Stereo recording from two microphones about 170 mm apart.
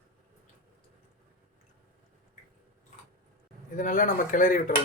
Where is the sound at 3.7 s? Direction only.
50° left (ahead or behind).